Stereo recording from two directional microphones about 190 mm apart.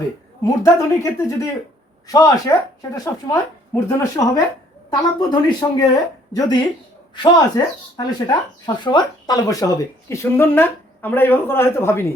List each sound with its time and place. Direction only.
0.6 s speech: 15° left (ahead or behind)